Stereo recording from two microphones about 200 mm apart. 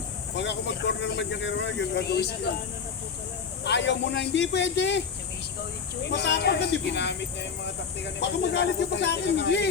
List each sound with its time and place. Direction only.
0.3 s speech: 60° left (ahead or behind)
3.6 s speech: 60° left (ahead or behind)
6.1 s speech: 60° left (ahead or behind)